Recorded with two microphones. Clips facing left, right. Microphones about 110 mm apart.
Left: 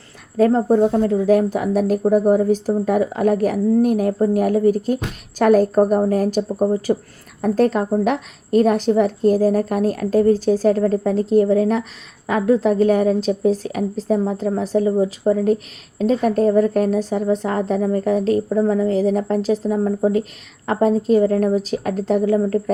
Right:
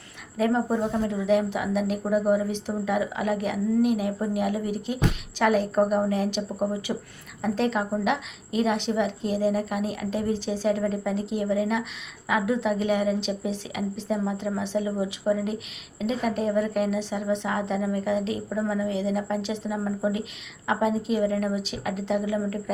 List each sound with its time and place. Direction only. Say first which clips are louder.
0.3 s a woman's voice: left 9 dB; 40° left (ahead or behind)